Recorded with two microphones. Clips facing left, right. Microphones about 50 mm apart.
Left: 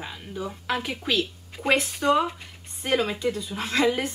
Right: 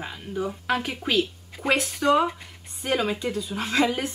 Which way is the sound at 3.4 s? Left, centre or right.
Centre.